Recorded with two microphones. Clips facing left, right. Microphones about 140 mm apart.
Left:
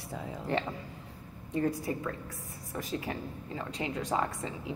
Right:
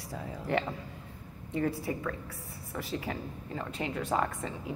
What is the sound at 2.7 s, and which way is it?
A woman's voice, 20° left (ahead or behind).